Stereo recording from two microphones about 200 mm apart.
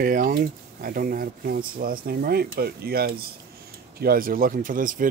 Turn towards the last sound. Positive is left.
turn(degrees=-40)  # may be behind; listen again after turning